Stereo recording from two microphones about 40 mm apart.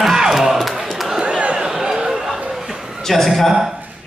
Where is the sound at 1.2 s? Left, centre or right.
Right.